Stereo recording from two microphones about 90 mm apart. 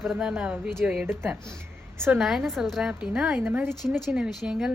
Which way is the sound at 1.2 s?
30° right (ahead or behind).